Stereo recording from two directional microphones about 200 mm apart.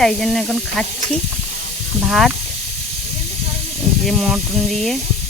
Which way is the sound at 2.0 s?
Centre (ahead or behind).